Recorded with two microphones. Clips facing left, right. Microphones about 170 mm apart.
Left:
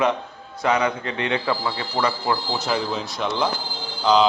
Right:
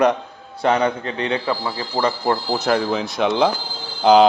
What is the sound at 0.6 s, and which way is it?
Speech, 30° right (ahead or behind).